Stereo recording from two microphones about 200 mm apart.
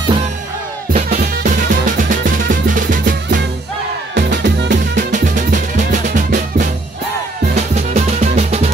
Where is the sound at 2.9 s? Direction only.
40° right (ahead or behind).